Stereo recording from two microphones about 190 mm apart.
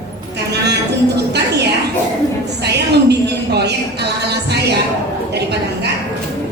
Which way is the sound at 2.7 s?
60° right (ahead or behind).